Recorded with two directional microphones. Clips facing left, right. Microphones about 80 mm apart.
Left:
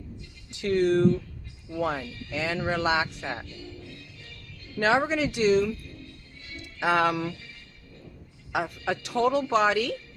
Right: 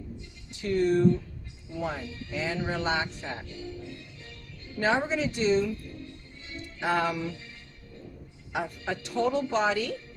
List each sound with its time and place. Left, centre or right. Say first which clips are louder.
0.5 s music: left 2 dB; left
2.3 s music: left 3 dB; left
3.2 s speech: left 3 dB; left
3.4 s music: right 3 dB; right
4.8 s a woman's voice: left 3 dB; left
5.8 s music: right 3 dB; right
6.7 s a woman's voice: left 4 dB; left
8.5 s a woman's voice: left 3 dB; left